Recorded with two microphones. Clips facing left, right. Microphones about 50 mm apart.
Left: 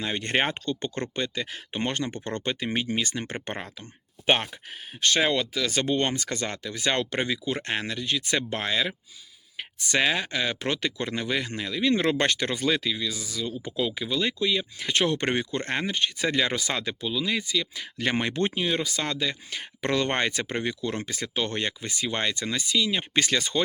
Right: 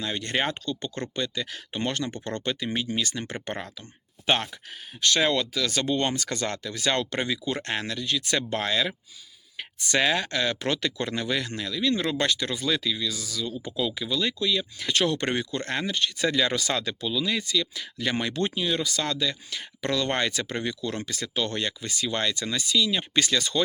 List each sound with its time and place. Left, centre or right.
0.0 s speech: left
4.9 s speech: left
12.0 s speech: left
12.7 s speech: left
18.0 s speech: left